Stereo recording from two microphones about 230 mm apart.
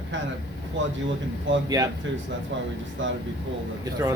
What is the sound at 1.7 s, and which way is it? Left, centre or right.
Speech, centre.